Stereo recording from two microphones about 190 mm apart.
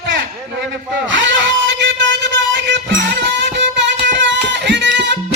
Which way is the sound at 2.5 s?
65° right (ahead or behind).